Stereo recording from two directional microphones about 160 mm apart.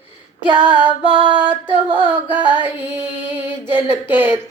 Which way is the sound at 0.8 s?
10° right (ahead or behind).